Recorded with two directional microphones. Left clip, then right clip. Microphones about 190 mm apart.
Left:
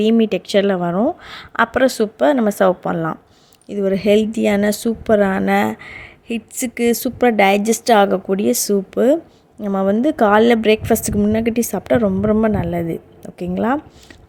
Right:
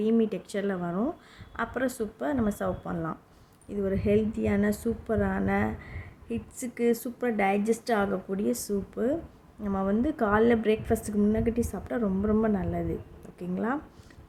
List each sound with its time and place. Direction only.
0.0 s a woman's voice: 50° left (ahead or behind)